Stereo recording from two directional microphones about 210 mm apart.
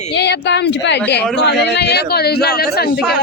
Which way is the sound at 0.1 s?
55° left (ahead or behind).